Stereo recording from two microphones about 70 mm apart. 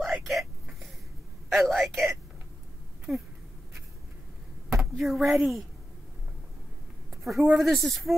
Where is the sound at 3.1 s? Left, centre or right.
Centre.